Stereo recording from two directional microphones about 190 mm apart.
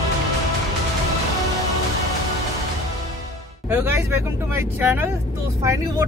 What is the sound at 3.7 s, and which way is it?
Speech, 10° right (ahead or behind).